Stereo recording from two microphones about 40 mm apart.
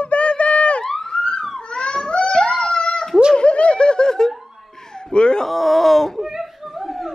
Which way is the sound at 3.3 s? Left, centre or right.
Left.